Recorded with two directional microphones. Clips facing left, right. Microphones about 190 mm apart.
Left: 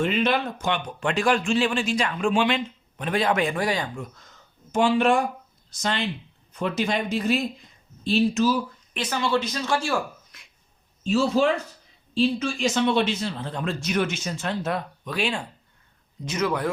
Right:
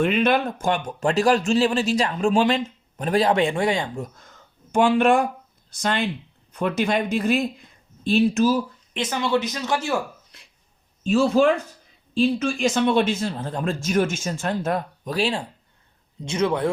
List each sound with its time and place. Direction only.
0.0 s speech: 60° right (ahead or behind); by 3.8 s 25° right (ahead or behind)
4.7 s speech: 55° right (ahead or behind)
8.9 s speech: 20° right (ahead or behind)
11.0 s speech: 50° right (ahead or behind); by 16.6 s 30° right (ahead or behind)